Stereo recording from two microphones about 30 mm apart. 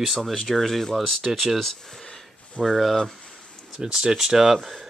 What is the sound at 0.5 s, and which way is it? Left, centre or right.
Speech, centre.